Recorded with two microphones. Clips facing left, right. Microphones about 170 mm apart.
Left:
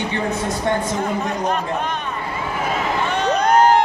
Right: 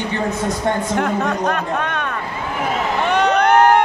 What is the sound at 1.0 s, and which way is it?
A man's voice, 70° right (ahead or behind).